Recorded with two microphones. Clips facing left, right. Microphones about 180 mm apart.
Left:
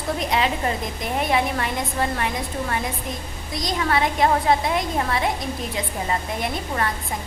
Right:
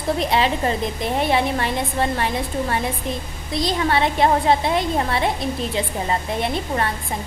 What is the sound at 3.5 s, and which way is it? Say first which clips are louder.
A woman's voice: right 3 dB; 30° right (ahead or behind).